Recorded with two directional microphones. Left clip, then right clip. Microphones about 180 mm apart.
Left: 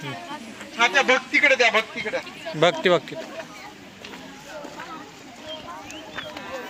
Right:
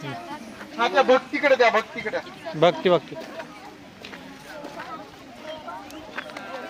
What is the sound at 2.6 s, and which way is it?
Speech, centre (ahead or behind).